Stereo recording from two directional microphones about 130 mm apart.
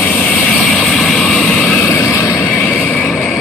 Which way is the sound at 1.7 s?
20° left (ahead or behind).